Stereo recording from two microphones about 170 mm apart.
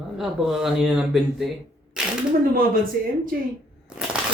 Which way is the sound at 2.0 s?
5° right (ahead or behind).